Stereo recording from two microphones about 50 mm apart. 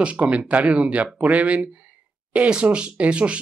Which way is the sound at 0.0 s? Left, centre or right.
Right.